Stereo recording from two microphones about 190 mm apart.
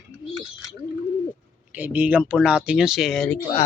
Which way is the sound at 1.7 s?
10° right (ahead or behind).